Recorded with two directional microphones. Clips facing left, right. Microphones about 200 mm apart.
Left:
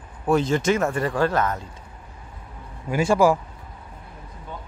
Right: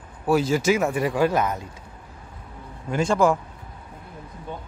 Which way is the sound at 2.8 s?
5° left (ahead or behind).